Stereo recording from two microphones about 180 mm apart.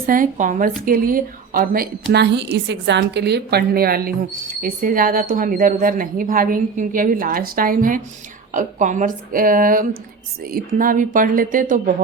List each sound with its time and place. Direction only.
0.0 s speech: 50° right (ahead or behind)
2.1 s a woman's voice: 70° right (ahead or behind); by 11.8 s 50° right (ahead or behind)